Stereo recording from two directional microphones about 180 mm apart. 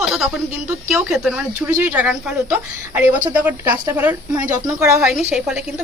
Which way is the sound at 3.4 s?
10° right (ahead or behind).